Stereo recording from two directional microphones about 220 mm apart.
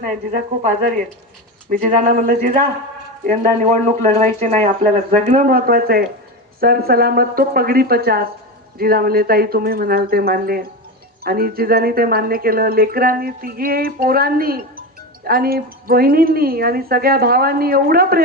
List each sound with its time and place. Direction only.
0.0 s speech: 40° right (ahead or behind)